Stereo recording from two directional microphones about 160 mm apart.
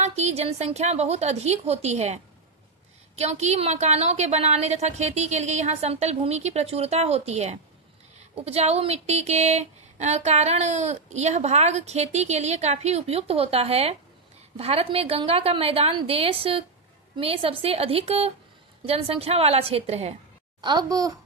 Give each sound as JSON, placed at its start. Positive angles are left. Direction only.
{"t": 0.0, "sound": "a woman's voice", "side_deg": -45}
{"t": 20.6, "sound": "a child's voice", "side_deg": -25}